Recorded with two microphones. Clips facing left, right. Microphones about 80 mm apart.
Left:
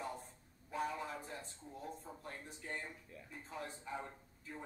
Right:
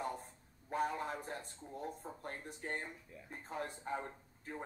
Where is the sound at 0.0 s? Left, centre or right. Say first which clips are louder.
Right 4 dB; right.